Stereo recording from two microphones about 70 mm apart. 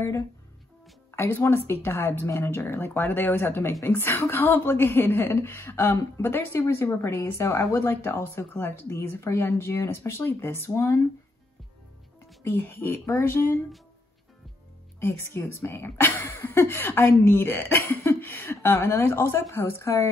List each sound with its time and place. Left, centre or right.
1.1 s a woman's voice: left
12.4 s a woman's voice: left
15.0 s a woman's voice: left